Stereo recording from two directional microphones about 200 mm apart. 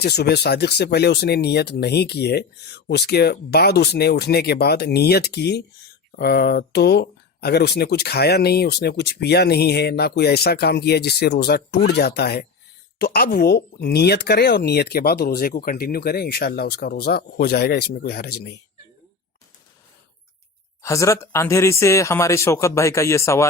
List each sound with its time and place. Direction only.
0.0 s speech: 55° left (ahead or behind)
20.8 s speech: 15° left (ahead or behind)